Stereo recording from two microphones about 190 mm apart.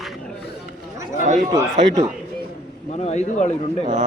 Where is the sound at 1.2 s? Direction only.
40° right (ahead or behind).